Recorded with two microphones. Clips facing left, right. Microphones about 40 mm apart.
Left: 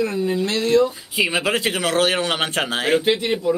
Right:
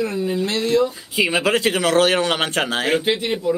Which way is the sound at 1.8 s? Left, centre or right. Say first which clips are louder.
Right 3 dB; left.